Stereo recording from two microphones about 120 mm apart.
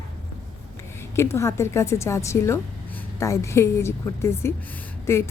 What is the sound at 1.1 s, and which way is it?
A woman's voice, 20° left (ahead or behind).